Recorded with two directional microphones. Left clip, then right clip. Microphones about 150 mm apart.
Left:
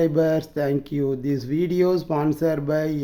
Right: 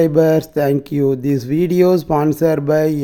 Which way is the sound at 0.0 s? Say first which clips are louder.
Right 7 dB; 45° right (ahead or behind).